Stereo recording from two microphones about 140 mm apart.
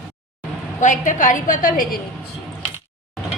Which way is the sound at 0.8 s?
65° left (ahead or behind).